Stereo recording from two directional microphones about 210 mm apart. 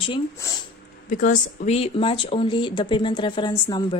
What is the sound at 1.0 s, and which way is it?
Speech, 40° left (ahead or behind).